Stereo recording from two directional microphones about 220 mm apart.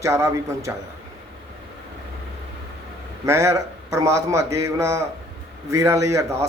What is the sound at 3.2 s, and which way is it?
Speech, 15° right (ahead or behind).